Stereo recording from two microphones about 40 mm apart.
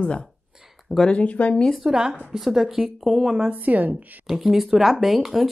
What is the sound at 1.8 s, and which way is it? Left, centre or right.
Speech, centre.